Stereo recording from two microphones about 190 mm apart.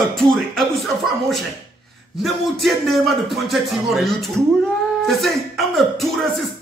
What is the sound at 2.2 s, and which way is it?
Speech, centre (ahead or behind).